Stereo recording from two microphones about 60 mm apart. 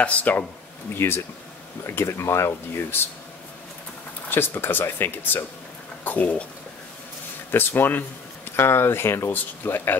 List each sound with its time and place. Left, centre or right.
0.0 s speech: left
0.9 s speech: left
4.3 s speech: left
7.5 s speech: left
9.3 s speech: left